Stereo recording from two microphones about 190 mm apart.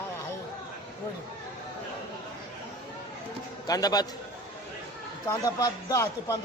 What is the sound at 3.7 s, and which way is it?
Speech, 20° left (ahead or behind).